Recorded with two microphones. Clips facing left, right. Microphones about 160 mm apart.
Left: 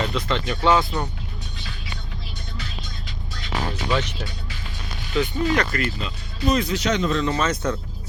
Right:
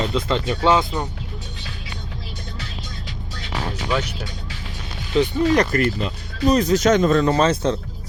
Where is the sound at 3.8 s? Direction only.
10° right (ahead or behind).